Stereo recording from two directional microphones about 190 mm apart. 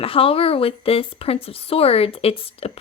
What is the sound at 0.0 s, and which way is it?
Speech, 30° left (ahead or behind).